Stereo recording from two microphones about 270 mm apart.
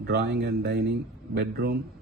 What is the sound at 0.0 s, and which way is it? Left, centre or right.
Speech, right.